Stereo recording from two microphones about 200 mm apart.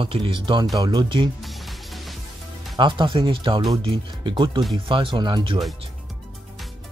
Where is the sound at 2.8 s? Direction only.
25° right (ahead or behind).